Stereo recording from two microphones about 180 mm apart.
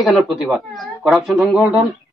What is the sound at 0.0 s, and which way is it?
Speech, centre (ahead or behind).